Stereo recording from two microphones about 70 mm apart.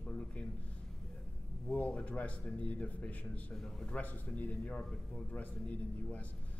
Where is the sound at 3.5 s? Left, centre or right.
Centre.